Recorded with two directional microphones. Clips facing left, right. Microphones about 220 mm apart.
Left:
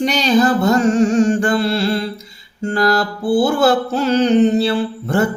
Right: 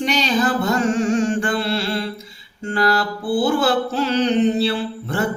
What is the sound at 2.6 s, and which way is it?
Music, 40° left (ahead or behind).